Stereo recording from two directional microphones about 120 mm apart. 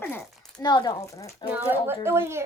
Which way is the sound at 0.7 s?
35° left (ahead or behind).